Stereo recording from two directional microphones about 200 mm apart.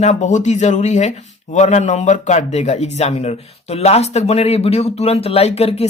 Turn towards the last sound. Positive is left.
turn(degrees=30)  # may be behind; listen again after turning